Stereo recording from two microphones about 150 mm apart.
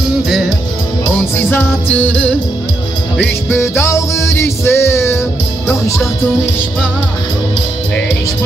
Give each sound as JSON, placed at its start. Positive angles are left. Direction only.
{"t": 1.5, "sound": "music", "side_deg": 10}
{"t": 3.4, "sound": "music", "side_deg": 15}